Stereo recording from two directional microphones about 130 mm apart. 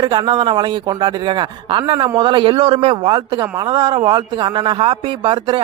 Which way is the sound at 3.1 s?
30° right (ahead or behind).